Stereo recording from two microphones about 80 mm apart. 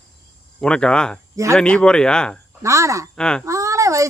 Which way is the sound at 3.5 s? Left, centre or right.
Right.